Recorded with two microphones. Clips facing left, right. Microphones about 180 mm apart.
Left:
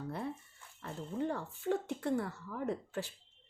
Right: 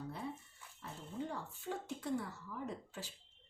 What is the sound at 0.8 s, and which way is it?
Speech, 60° left (ahead or behind).